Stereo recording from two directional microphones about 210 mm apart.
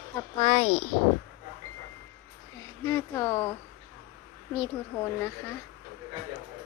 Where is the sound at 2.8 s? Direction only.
15° left (ahead or behind).